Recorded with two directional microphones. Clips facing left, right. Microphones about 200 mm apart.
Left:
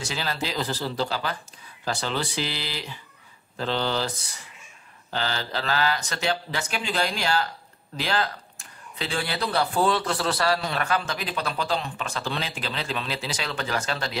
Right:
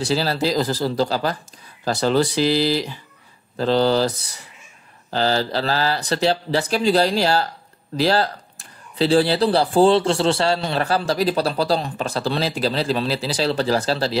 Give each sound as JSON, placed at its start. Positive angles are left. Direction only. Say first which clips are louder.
{"t": 0.0, "sound": "speech", "louder": "right 10 dB", "side_deg": -35}
{"t": 5.1, "sound": "speech", "louder": "right 9 dB", "side_deg": -35}